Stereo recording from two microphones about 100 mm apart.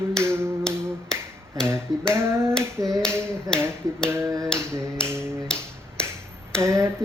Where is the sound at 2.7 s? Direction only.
35° right (ahead or behind).